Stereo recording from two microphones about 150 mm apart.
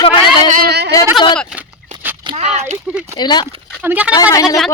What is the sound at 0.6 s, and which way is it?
Speech, 90° right.